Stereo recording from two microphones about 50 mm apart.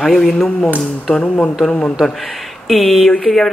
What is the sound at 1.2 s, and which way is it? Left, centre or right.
Speech, left.